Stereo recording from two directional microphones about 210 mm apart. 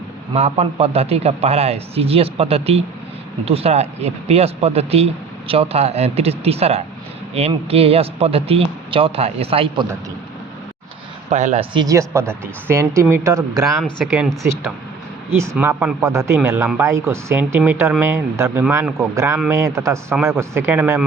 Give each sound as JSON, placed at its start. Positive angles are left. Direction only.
{"t": 0.3, "sound": "speech", "side_deg": -30}
{"t": 11.3, "sound": "speech", "side_deg": -35}
{"t": 11.7, "sound": "speech", "side_deg": -20}
{"t": 13.8, "sound": "speech", "side_deg": 0}
{"t": 15.3, "sound": "speech", "side_deg": -10}